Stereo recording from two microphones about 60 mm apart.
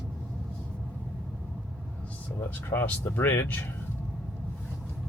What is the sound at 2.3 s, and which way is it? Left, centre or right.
Speech, left.